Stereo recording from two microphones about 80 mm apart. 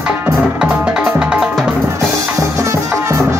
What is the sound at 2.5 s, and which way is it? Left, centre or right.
Music, right.